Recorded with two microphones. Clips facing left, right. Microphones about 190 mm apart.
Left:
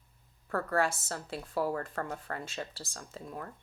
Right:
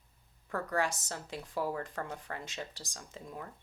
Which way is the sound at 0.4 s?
20° right (ahead or behind).